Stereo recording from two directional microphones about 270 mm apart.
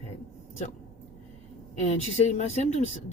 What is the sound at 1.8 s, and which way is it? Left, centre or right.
Speech, left.